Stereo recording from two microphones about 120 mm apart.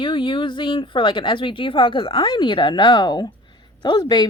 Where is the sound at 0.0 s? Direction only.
45° left (ahead or behind).